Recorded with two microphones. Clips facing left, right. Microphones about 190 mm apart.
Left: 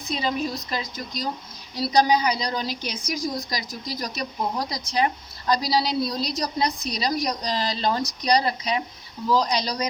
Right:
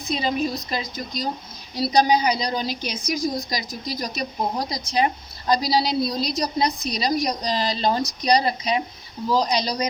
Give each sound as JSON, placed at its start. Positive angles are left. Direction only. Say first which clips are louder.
{"t": 0.1, "sound": "a woman's voice", "louder": "right 2 dB", "side_deg": -20}